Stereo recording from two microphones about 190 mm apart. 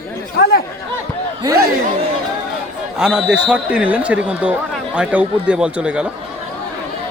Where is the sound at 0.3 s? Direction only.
55° left (ahead or behind).